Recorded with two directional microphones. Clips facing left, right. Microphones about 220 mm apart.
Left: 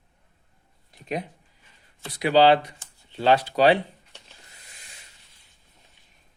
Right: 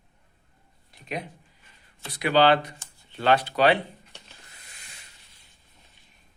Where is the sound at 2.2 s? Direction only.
30° left (ahead or behind).